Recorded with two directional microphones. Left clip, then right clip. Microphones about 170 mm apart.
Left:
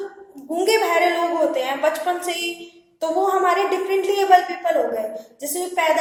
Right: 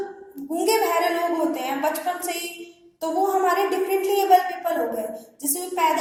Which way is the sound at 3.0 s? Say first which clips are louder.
Left 3 dB; 20° left (ahead or behind).